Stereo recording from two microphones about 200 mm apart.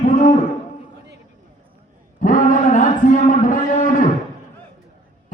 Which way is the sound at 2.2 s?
40° left (ahead or behind).